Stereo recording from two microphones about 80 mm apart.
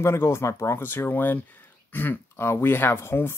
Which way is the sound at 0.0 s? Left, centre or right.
Left.